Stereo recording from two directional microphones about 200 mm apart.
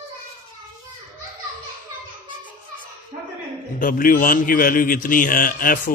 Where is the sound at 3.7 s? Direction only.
45° left (ahead or behind).